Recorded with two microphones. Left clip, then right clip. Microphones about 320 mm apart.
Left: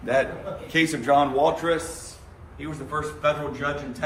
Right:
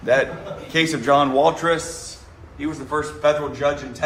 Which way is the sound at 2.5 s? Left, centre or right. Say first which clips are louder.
Right 6 dB; centre.